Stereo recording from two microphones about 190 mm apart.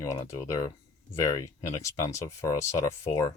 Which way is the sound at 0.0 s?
15° left (ahead or behind).